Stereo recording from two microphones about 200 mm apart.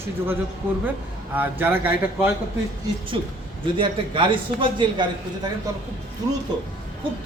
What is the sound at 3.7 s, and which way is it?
A man's voice, 25° right (ahead or behind).